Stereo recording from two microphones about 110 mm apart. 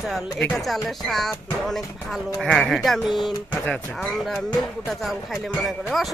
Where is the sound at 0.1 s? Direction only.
Centre (ahead or behind).